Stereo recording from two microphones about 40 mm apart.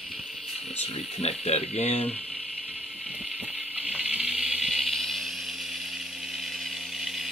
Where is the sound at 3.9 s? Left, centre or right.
Right.